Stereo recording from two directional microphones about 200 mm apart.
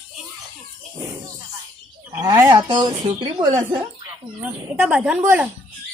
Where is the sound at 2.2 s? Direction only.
20° right (ahead or behind).